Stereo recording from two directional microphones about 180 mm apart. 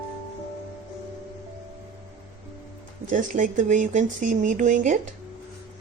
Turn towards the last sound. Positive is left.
turn(degrees=-45)  # may be behind; listen again after turning